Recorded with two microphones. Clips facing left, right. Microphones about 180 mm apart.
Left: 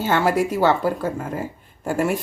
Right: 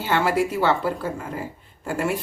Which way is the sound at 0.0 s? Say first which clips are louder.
Left 2 dB; 45° left (ahead or behind).